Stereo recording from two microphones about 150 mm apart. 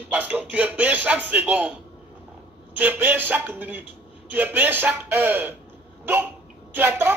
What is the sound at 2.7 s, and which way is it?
Speech, 10° right (ahead or behind).